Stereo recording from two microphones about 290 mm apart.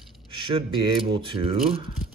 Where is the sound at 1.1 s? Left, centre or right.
Centre.